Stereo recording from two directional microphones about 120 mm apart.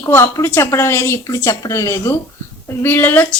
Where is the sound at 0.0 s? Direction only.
25° left (ahead or behind).